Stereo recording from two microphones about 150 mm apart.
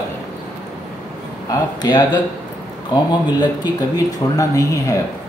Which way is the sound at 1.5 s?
30° left (ahead or behind).